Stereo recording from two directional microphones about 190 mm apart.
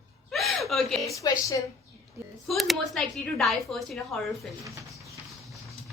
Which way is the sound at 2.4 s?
Centre (ahead or behind).